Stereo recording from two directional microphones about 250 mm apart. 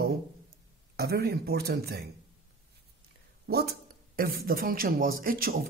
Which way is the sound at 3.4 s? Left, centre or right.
Right.